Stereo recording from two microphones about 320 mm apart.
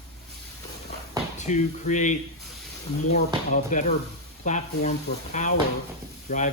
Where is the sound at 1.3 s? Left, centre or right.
Left.